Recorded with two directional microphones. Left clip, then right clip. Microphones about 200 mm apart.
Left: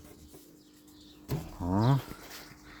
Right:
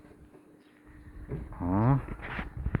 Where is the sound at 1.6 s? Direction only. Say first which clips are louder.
Right 1 dB; centre (ahead or behind).